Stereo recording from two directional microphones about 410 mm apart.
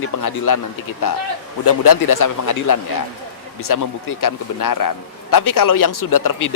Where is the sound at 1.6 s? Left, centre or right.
Left.